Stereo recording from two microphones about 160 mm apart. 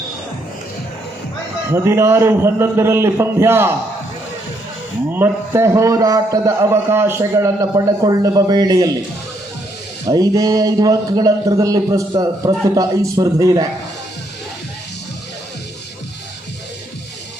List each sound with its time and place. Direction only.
1.7 s a man's voice: 15° right (ahead or behind)
5.1 s a man's voice: 15° right (ahead or behind)
10.1 s a man's voice: 20° right (ahead or behind)